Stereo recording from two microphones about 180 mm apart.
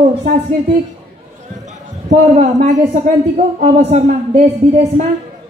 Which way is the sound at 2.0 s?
40° right (ahead or behind).